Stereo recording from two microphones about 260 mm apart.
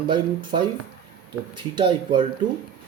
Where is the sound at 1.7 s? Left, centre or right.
Centre.